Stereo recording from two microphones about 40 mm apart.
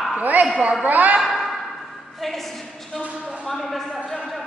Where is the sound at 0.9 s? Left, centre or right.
Right.